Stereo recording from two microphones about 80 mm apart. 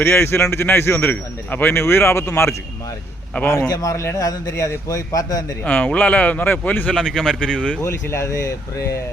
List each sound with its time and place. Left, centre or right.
0.0 s speech: left
3.7 s a man's voice: left
5.6 s speech: centre
6.9 s speech: centre
7.8 s speech: left